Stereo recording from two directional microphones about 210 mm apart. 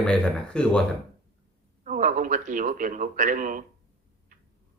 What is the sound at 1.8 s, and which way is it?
Speech, 40° right (ahead or behind).